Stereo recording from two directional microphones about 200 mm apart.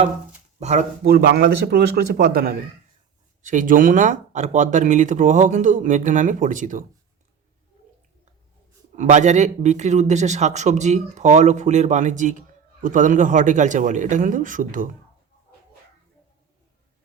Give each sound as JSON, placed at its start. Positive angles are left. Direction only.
{"t": 0.6, "sound": "a man's voice", "side_deg": -35}
{"t": 1.0, "sound": "a man's voice", "side_deg": -55}
{"t": 9.0, "sound": "a man's voice", "side_deg": -35}